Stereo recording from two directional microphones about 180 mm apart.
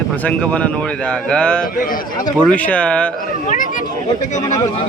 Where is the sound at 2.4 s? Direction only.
5° left (ahead or behind).